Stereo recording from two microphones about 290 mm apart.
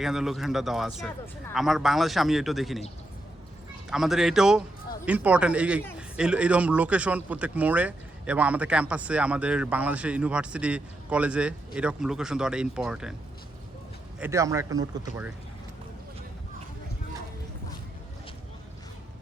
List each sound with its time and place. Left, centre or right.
0.0 s a man's voice: centre
3.8 s a man's voice: centre
14.2 s speech: centre